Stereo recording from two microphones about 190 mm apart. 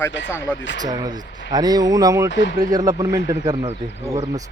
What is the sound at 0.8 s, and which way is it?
Speech, 20° right (ahead or behind).